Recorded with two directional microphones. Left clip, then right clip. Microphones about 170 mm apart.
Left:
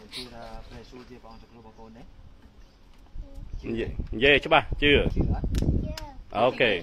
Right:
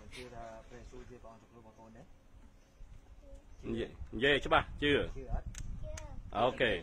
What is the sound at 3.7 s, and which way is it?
Speech, 15° left (ahead or behind).